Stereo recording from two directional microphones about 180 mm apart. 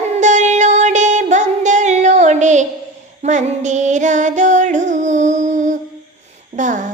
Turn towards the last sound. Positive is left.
turn(degrees=-45)  # may be behind; listen again after turning